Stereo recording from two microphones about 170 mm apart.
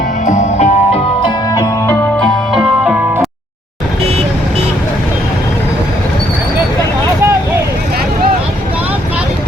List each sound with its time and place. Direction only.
0.3 s music: 40° left (ahead or behind)
1.2 s music: 20° left (ahead or behind)
2.1 s music: 5° left (ahead or behind)